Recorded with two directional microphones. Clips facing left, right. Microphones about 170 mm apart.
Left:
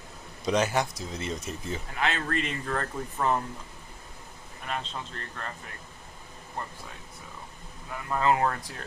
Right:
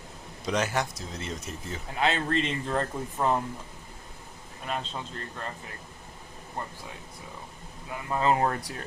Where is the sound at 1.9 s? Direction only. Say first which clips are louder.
Right 4 dB; 25° right (ahead or behind).